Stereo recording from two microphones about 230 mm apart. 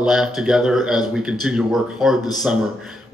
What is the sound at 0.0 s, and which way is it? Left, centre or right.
A man's voice, centre.